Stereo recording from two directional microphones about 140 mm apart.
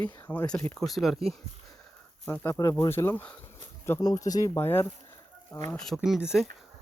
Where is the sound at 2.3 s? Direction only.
15° left (ahead or behind).